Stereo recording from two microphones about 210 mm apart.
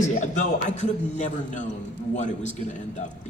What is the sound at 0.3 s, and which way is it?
Speech, 35° left (ahead or behind).